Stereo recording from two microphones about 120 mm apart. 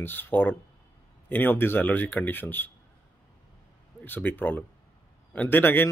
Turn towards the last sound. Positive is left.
turn(degrees=15)  # may be behind; listen again after turning